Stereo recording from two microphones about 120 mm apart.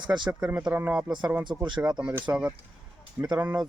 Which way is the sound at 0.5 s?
15° right (ahead or behind).